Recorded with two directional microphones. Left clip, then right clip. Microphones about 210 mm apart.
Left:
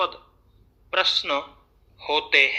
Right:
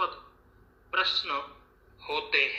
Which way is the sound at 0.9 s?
55° left (ahead or behind).